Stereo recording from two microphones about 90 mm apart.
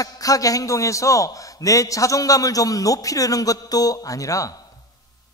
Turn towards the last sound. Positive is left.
turn(degrees=40)  # may be behind; listen again after turning